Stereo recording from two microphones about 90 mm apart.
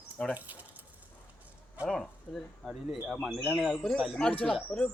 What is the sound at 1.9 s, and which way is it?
Speech, 5° left (ahead or behind).